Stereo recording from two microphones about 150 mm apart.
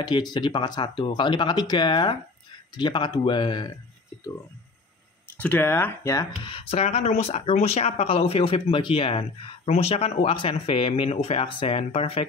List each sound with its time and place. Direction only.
0.0 s speech: 30° left (ahead or behind)
5.4 s speech: 10° left (ahead or behind)
6.4 s speech: 40° left (ahead or behind)